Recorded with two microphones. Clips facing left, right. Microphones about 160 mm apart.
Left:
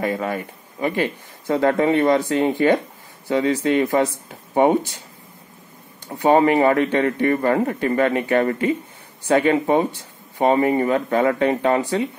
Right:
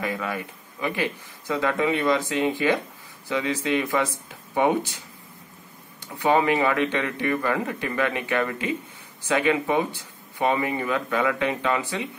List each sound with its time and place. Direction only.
0.0 s speech: 45° left (ahead or behind)
6.0 s speech: 45° left (ahead or behind)